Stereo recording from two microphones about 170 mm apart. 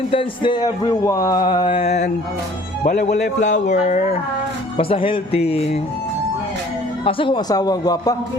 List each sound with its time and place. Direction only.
0.1 s speech: 30° left (ahead or behind); by 4.1 s 45° left (ahead or behind)
4.8 s speech: 30° left (ahead or behind)
7.0 s speech: 30° left (ahead or behind)